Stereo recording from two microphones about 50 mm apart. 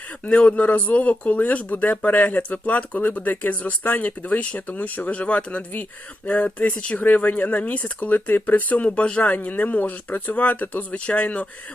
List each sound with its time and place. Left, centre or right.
0.3 s speech: left
8.9 s speech: left